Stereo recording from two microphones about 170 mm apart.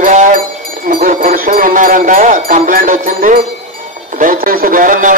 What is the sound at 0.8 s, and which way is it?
A man's voice, 50° right (ahead or behind).